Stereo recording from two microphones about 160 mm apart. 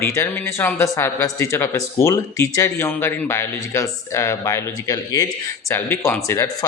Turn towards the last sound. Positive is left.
turn(degrees=20)  # may be behind; listen again after turning